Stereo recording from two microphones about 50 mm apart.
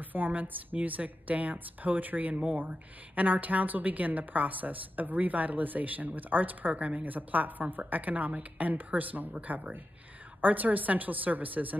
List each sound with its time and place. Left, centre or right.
0.0 s a woman's voice: right